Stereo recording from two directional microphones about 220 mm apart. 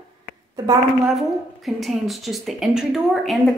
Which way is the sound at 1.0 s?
Centre (ahead or behind).